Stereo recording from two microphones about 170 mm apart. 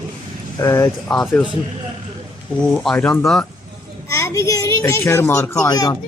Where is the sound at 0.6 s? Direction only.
20° left (ahead or behind).